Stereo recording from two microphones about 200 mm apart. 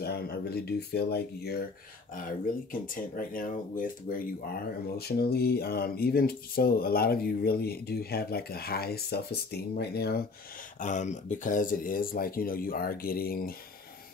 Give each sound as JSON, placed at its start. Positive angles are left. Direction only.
{"t": 0.0, "sound": "speech", "side_deg": 55}
{"t": 2.7, "sound": "speech", "side_deg": 45}
{"t": 10.8, "sound": "speech", "side_deg": 40}